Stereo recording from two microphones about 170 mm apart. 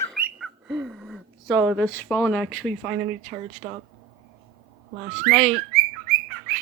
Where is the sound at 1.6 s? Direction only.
5° right (ahead or behind).